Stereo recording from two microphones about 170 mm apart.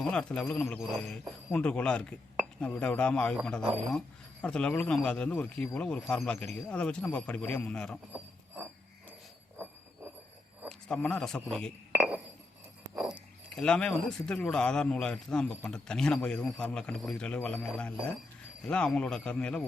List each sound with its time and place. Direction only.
0.0 s speech: 5° left (ahead or behind)
10.7 s a man's voice: 5° left (ahead or behind)
11.9 s chink: 10° right (ahead or behind)
13.0 s speech: 5° right (ahead or behind)